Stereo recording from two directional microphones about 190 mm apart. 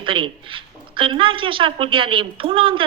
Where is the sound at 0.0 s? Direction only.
25° right (ahead or behind).